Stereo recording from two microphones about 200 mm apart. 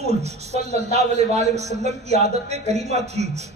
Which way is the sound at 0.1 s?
35° right (ahead or behind).